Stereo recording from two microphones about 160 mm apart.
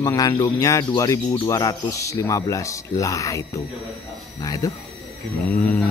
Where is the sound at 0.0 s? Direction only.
20° left (ahead or behind).